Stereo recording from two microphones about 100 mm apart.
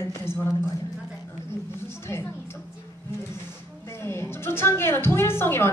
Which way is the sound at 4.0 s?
25° left (ahead or behind).